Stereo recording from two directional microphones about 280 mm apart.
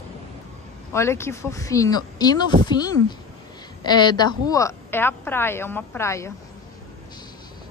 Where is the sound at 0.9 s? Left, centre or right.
Centre.